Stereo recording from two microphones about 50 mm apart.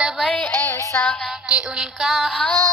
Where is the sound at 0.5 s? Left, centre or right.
Left.